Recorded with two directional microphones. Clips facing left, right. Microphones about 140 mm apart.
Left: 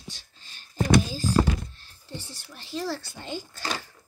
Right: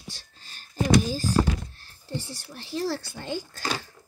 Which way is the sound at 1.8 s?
40° right (ahead or behind).